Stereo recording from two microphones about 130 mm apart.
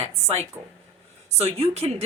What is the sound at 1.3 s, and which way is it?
Speech, 55° right (ahead or behind).